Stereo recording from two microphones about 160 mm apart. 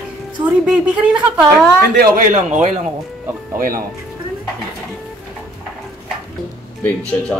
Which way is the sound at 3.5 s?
60° right (ahead or behind).